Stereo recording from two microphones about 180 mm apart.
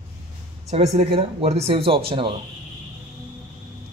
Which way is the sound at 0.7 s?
35° right (ahead or behind).